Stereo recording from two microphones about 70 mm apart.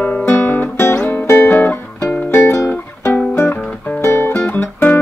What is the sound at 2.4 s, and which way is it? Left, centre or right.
Music, left.